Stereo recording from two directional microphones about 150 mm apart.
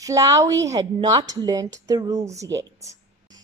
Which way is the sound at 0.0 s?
20° right (ahead or behind).